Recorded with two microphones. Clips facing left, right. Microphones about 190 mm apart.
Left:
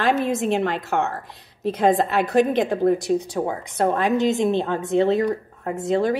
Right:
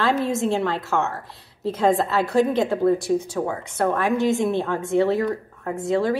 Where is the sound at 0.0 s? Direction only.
15° left (ahead or behind).